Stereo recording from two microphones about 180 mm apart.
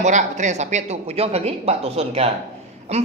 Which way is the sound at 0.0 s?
40° right (ahead or behind).